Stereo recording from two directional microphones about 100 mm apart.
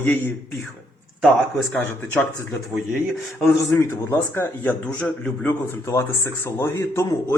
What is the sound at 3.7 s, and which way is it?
Speech, 25° left (ahead or behind).